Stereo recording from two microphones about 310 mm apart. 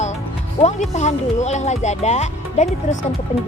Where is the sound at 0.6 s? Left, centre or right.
Left.